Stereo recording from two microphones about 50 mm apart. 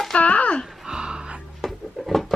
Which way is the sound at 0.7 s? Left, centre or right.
Centre.